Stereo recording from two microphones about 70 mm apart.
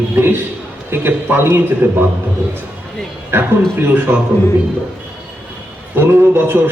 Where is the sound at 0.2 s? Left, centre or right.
Right.